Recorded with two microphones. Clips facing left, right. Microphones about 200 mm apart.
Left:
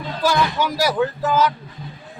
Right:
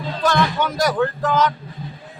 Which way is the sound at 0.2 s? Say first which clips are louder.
Even; 5° left (ahead or behind).